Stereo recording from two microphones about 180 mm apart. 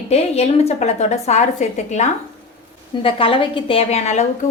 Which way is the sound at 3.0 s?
30° left (ahead or behind).